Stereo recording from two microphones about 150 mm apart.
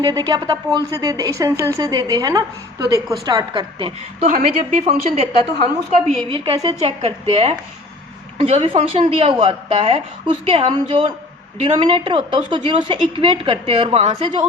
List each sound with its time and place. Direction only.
0.0 s a woman's voice: 25° right (ahead or behind)
4.2 s a woman's voice: 55° right (ahead or behind)
4.9 s a woman's voice: 45° right (ahead or behind)